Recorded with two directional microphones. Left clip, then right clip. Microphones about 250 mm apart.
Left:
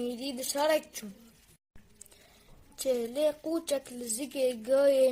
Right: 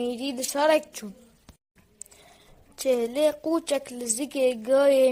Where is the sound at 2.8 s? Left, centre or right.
Right.